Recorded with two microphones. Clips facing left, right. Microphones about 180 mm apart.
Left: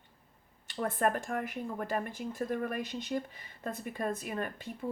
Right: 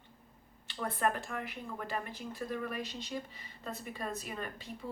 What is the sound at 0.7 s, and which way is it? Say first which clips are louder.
Speech: left 3 dB; 45° left (ahead or behind).